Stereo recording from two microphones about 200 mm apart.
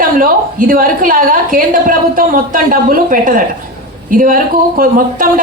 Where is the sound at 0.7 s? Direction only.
45° right (ahead or behind).